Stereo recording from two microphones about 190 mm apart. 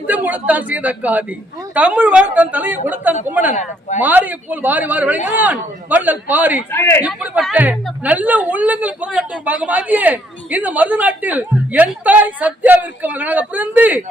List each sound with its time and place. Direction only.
0.1 s speech: 10° right (ahead or behind)
3.5 s speech: 40° left (ahead or behind)
4.0 s speech: 10° right (ahead or behind)
6.7 s a man's voice: 15° left (ahead or behind)
7.0 s speech: 5° right (ahead or behind)